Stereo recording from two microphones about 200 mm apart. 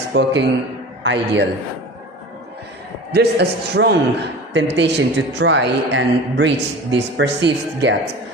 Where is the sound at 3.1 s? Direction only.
55° right (ahead or behind).